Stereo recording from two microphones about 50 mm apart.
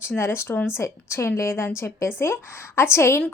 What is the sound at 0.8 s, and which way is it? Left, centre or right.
A woman's voice, left.